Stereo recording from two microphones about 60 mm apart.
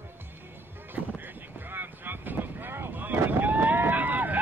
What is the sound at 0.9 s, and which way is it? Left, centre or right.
Boat, right.